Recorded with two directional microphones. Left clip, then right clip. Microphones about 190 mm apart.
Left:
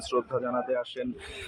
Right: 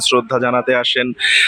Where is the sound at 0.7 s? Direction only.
10° right (ahead or behind).